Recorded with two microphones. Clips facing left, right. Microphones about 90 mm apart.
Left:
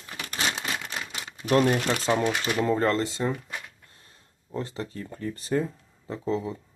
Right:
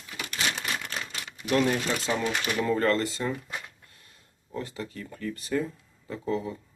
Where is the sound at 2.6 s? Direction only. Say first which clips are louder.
Left 1 dB; 25° left (ahead or behind).